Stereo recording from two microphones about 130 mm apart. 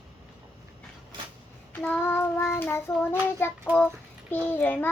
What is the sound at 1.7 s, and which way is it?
Child singing, 10° left (ahead or behind).